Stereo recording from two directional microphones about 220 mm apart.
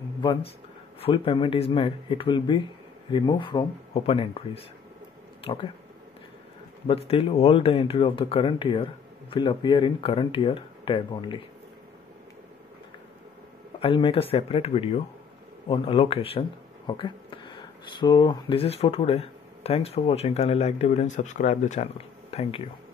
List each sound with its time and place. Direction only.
0.2 s speech: 20° left (ahead or behind)
6.9 s speech: 25° left (ahead or behind)
13.7 s speech: 25° left (ahead or behind)